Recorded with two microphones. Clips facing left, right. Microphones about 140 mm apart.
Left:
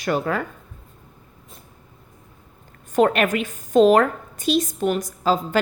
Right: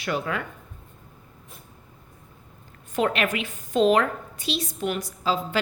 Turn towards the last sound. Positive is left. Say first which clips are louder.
# left 5 dB
turn(degrees=45)  # may be behind; listen again after turning